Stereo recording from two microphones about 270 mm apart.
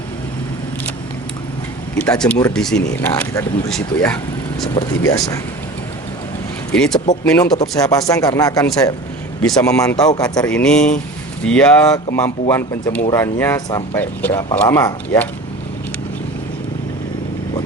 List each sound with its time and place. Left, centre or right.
2.0 s speech: centre
6.7 s speech: centre